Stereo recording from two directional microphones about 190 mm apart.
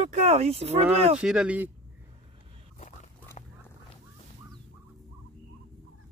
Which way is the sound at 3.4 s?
35° left (ahead or behind).